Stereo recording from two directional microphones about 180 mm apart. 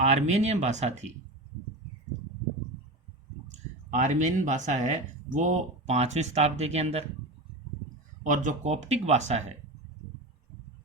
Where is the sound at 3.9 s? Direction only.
40° right (ahead or behind).